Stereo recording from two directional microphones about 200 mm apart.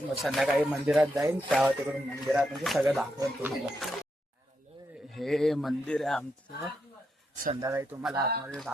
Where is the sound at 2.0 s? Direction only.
5° right (ahead or behind).